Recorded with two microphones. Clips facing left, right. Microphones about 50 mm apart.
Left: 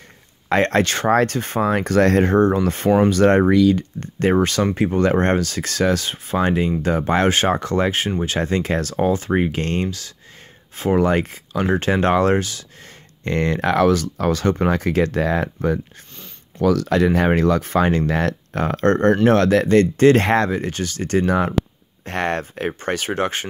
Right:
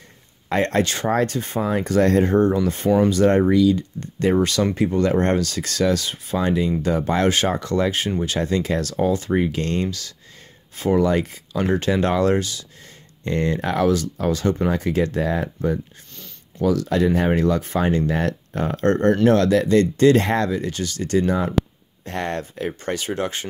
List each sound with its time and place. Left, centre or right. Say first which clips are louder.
0.5 s speech: left 3 dB; left
9.8 s speech: left 1 dB; left
11.0 s speech: left 2 dB; left
13.2 s speech: left 2 dB; left
14.7 s speech: left 2 dB; left
16.6 s speech: left 2 dB; left
19.2 s speech: even; left
22.0 s speech: left 4 dB; left